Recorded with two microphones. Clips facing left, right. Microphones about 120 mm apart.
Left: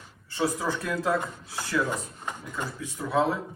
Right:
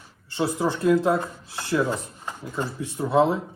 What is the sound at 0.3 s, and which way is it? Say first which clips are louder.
Speech: right 3 dB; 25° right (ahead or behind).